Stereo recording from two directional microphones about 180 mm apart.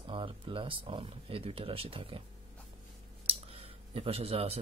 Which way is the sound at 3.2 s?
35° right (ahead or behind).